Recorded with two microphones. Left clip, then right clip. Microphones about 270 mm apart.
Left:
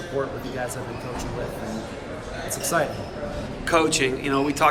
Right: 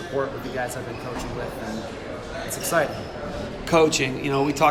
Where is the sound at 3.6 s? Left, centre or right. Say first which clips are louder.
Right 1 dB; centre.